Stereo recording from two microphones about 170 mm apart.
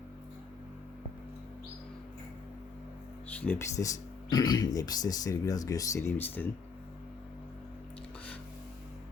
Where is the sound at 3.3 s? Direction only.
10° left (ahead or behind).